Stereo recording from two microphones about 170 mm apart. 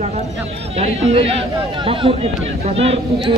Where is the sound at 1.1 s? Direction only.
35° right (ahead or behind).